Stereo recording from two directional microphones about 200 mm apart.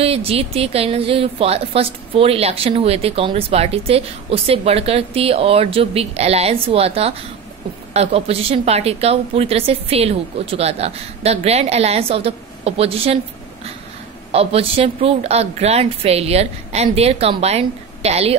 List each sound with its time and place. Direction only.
0.0 s a woman's voice: 30° right (ahead or behind)
14.3 s a woman's voice: 30° right (ahead or behind)